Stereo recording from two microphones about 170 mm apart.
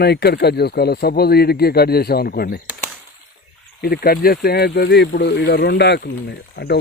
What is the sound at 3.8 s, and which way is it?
Speech, 65° left (ahead or behind).